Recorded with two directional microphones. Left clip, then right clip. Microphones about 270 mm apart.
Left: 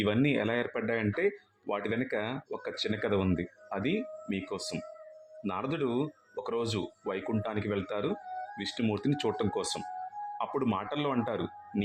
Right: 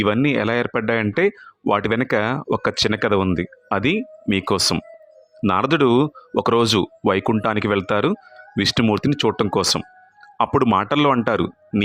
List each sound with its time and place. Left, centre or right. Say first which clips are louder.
0.0 s speech: right 10 dB; right